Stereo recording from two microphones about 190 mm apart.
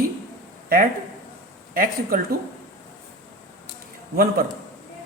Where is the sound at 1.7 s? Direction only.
50° right (ahead or behind).